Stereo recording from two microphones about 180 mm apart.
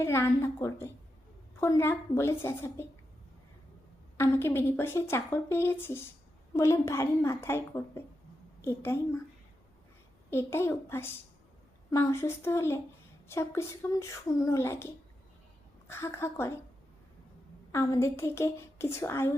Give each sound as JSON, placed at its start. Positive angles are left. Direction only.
{"t": 0.0, "sound": "a woman's voice", "side_deg": 15}
{"t": 4.2, "sound": "a woman's voice", "side_deg": 15}
{"t": 10.2, "sound": "a woman's voice", "side_deg": 15}
{"t": 17.7, "sound": "a woman's voice", "side_deg": 15}